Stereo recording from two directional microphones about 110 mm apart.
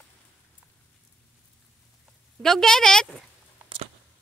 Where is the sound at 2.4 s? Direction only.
5° left (ahead or behind).